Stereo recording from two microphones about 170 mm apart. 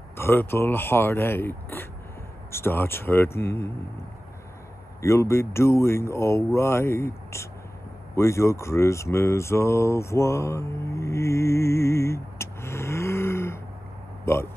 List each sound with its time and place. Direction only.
0.2 s speech: 15° left (ahead or behind)
5.0 s speech: 15° left (ahead or behind)
8.2 s a sound: 15° left (ahead or behind)
14.2 s speech: 15° left (ahead or behind)